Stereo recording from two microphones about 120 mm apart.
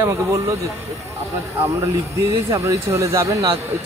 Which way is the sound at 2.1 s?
25° right (ahead or behind).